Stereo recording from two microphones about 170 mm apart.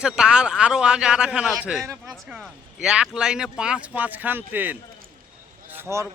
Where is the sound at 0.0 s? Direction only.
5° right (ahead or behind).